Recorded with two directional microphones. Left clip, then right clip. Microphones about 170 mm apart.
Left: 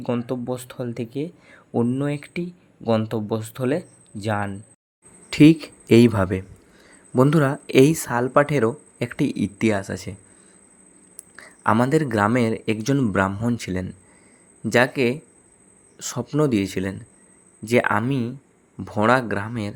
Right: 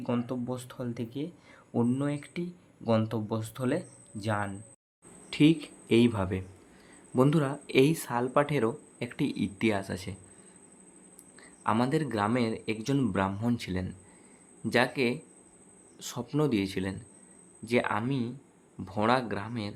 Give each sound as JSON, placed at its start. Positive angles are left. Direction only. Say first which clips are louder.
{"t": 0.0, "sound": "speech", "louder": "left 7 dB", "side_deg": 20}
{"t": 11.3, "sound": "a sound", "louder": "left 9 dB", "side_deg": 35}
{"t": 11.7, "sound": "speech", "louder": "left 9 dB", "side_deg": 30}